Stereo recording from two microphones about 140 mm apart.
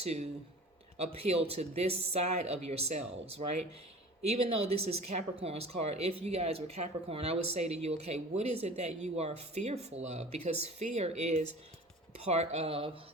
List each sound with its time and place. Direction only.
1.0 s speech: 45° right (ahead or behind)